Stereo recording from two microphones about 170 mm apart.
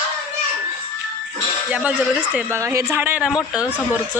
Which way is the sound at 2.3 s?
15° right (ahead or behind).